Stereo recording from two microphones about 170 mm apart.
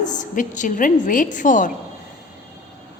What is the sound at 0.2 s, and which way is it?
A woman's voice, 45° left (ahead or behind).